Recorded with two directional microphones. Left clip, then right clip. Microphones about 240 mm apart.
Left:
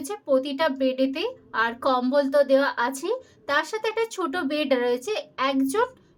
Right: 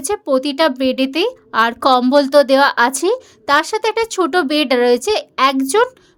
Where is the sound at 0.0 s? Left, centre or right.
Right.